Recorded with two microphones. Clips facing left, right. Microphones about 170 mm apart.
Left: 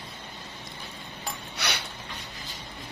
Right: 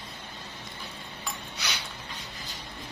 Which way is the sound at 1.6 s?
65° left (ahead or behind).